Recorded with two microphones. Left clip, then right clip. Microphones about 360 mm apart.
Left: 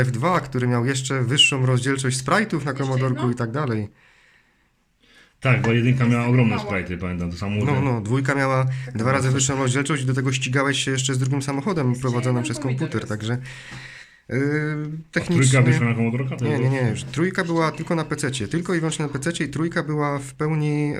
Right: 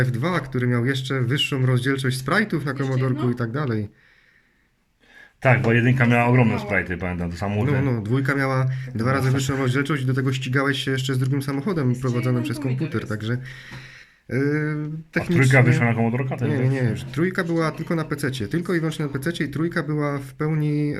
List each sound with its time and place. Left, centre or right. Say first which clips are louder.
0.0 s speech: left 3 dB; centre
5.4 s a man's voice: right 2 dB; centre
7.6 s speech: left 2 dB; centre
15.8 s a man's voice: right 2 dB; centre
16.4 s speech: left 4 dB; centre